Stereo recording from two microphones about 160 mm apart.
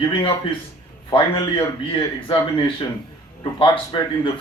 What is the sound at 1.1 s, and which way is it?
A man's voice, 30° left (ahead or behind).